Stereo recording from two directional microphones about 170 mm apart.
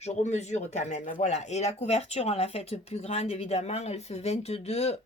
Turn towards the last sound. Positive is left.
turn(degrees=40)  # may be behind; listen again after turning